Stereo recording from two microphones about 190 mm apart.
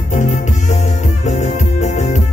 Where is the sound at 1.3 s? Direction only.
40° left (ahead or behind).